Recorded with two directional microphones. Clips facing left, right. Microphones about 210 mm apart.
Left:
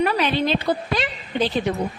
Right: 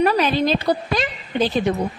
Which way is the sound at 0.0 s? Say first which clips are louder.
Right 3 dB; 40° right (ahead or behind).